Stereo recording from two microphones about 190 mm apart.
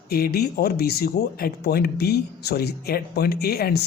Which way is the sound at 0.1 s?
55° left (ahead or behind).